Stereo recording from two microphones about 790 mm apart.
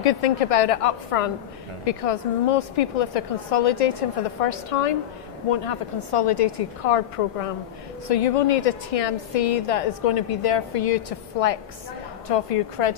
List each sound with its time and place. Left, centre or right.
0.0 s a woman's voice: left